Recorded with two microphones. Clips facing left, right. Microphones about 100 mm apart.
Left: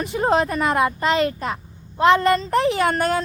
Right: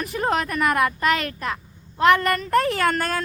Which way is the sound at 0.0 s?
25° left (ahead or behind).